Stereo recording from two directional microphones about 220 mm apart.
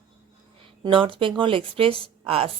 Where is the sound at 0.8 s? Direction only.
25° right (ahead or behind).